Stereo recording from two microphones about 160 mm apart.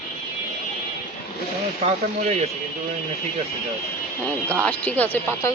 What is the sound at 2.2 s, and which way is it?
Speech, 40° right (ahead or behind).